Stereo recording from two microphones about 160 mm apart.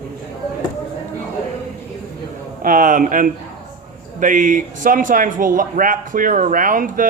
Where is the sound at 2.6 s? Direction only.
55° right (ahead or behind).